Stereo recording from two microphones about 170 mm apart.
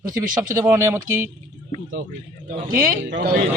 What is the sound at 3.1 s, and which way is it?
Speech, 65° right (ahead or behind).